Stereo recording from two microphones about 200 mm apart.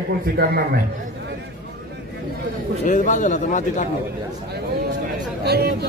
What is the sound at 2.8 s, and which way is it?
A man's voice, 40° left (ahead or behind).